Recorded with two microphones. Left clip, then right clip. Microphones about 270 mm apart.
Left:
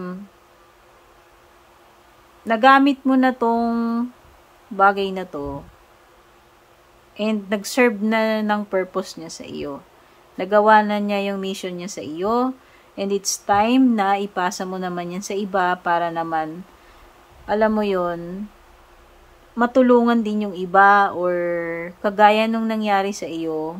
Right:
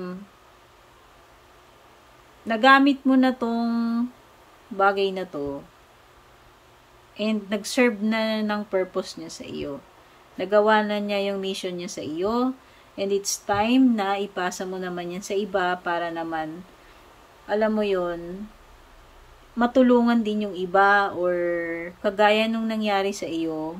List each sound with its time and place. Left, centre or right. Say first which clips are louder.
2.4 s speech: left 3 dB; centre
7.2 s speech: left 4 dB; centre
17.5 s a man's voice: left 4 dB; centre
19.6 s speech: left 4 dB; centre